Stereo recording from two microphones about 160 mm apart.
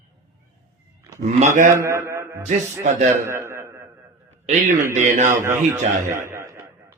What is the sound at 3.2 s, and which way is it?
A man's voice, 15° right (ahead or behind).